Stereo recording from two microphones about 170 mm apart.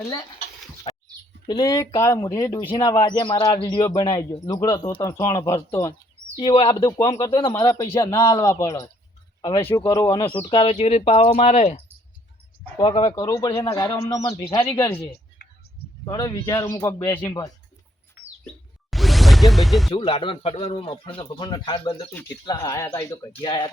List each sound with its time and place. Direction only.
0.9 s bird: 35° left (ahead or behind)
1.5 s speech: 25° left (ahead or behind)
4.8 s a man's voice: 30° left (ahead or behind)
5.0 s speech: 20° left (ahead or behind)
6.3 s a man's voice: 35° left (ahead or behind)
6.9 s a man's voice: 20° left (ahead or behind); by 11.8 s 40° left (ahead or behind)
12.8 s speech: 25° left (ahead or behind)
16.0 s speech: 20° left (ahead or behind)
18.9 s whoosh: centre (ahead or behind)
19.9 s a man's voice: 35° left (ahead or behind)